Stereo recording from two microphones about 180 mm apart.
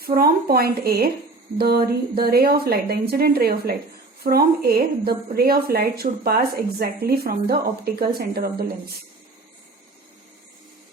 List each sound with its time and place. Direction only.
0.0 s a woman's voice: 55° right (ahead or behind)